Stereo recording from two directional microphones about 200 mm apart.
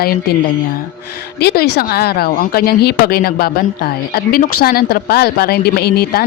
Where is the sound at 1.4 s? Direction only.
55° left (ahead or behind).